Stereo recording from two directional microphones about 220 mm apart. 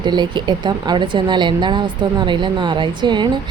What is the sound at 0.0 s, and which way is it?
Speech, 20° right (ahead or behind).